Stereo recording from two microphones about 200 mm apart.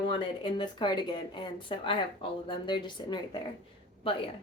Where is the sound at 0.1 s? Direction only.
25° left (ahead or behind).